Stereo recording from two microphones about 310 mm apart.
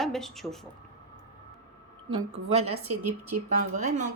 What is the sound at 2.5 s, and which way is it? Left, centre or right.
Speech, centre.